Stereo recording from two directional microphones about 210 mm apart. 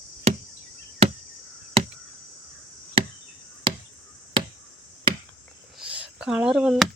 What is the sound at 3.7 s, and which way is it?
Chop, 25° right (ahead or behind).